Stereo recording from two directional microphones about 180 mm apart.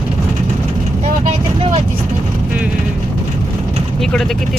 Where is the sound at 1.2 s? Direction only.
40° right (ahead or behind).